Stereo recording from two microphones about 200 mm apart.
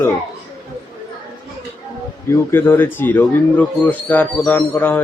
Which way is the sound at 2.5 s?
10° left (ahead or behind).